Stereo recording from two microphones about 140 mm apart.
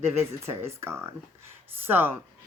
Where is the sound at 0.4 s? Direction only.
20° right (ahead or behind).